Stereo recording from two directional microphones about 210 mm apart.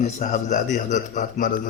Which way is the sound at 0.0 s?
35° left (ahead or behind).